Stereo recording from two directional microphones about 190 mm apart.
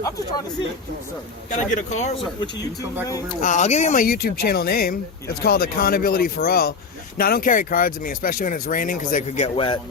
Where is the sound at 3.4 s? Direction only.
40° left (ahead or behind).